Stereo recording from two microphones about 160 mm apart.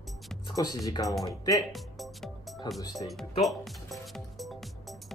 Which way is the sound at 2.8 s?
25° left (ahead or behind).